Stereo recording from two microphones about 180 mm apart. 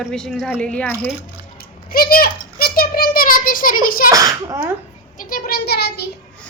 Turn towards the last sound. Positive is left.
turn(degrees=65)  # may be behind; listen again after turning